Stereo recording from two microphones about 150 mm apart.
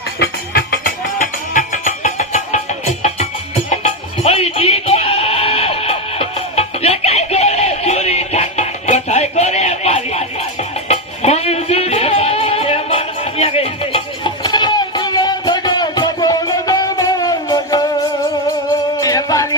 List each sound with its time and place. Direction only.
0.2 s music: 90° left; by 17.8 s 25° left (ahead or behind)
18.9 s music: 25° left (ahead or behind)